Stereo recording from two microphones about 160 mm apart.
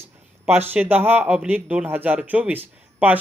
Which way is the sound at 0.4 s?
10° right (ahead or behind).